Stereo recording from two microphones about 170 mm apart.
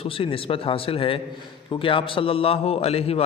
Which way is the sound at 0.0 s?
35° left (ahead or behind).